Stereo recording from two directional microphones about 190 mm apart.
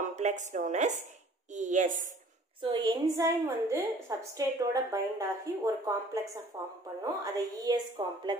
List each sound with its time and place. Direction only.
0.0 s a woman's voice: 35° right (ahead or behind)
2.6 s a woman's voice: 20° right (ahead or behind)